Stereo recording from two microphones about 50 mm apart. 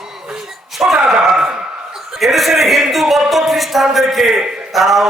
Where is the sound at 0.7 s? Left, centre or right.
Centre.